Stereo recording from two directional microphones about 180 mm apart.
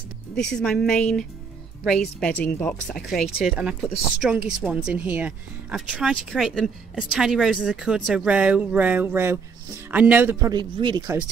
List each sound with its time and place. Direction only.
0.6 s speech: 5° left (ahead or behind)
10.5 s speech: 25° right (ahead or behind)